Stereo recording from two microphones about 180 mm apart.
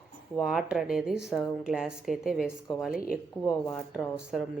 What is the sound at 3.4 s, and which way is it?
Speech, 15° left (ahead or behind).